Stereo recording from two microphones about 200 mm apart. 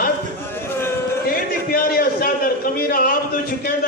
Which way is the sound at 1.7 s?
45° left (ahead or behind).